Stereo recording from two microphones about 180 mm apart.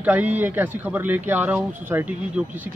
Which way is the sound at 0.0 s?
10° right (ahead or behind).